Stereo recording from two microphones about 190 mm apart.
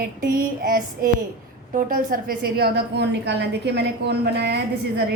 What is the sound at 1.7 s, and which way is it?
A woman's voice, 45° right (ahead or behind).